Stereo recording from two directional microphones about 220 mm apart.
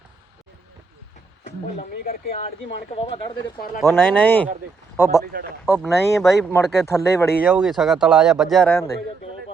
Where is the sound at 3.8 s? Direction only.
10° left (ahead or behind).